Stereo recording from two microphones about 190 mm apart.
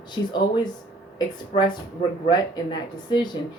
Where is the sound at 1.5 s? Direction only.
25° left (ahead or behind).